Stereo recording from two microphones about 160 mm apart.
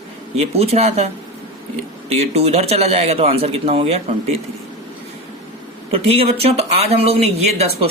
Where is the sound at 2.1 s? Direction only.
40° right (ahead or behind).